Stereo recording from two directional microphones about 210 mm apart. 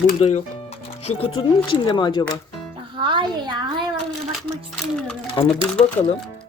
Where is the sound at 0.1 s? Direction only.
35° left (ahead or behind).